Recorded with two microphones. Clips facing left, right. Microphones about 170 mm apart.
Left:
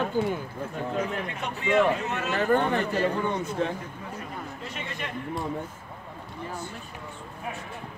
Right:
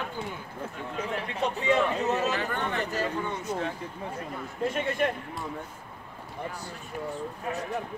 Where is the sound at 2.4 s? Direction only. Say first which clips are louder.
Left 8 dB; 40° left (ahead or behind).